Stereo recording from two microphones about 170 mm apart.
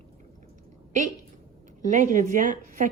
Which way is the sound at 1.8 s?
50° right (ahead or behind).